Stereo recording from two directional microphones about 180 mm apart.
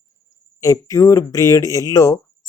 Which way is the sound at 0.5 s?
20° left (ahead or behind).